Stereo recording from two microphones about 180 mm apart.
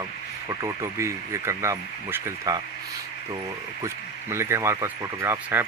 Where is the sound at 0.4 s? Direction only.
15° right (ahead or behind).